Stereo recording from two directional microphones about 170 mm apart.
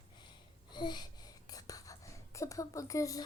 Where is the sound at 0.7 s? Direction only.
25° left (ahead or behind).